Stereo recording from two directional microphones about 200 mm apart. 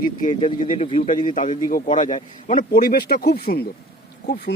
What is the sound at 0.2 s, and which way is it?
A man's voice, 35° left (ahead or behind).